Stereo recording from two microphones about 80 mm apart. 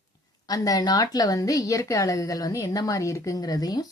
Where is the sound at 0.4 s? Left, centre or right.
Left.